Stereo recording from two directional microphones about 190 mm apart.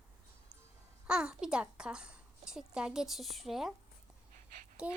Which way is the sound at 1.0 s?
5° right (ahead or behind).